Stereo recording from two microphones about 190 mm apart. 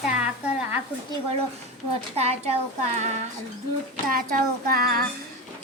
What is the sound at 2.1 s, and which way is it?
Speech, 35° right (ahead or behind).